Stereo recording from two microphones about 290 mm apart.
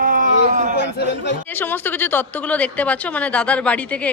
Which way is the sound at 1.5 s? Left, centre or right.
Centre.